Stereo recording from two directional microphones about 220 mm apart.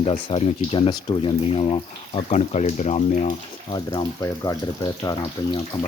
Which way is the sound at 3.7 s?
15° left (ahead or behind).